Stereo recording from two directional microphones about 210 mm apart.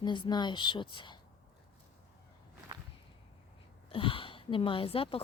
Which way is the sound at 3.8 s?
25° left (ahead or behind).